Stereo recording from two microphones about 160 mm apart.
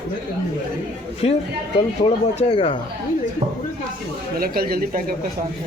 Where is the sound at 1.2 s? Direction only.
40° left (ahead or behind).